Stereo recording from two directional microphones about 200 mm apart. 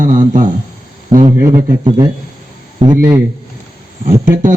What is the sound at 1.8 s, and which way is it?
A man's voice, 25° right (ahead or behind).